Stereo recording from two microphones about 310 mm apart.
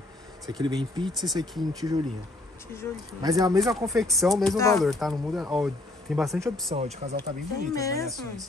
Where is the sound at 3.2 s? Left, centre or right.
Centre.